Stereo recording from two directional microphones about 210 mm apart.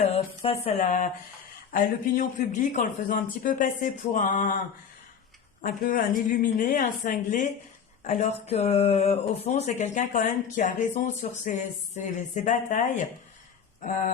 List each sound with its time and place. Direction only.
0.0 s speech: 30° left (ahead or behind)
5.6 s speech: 40° left (ahead or behind)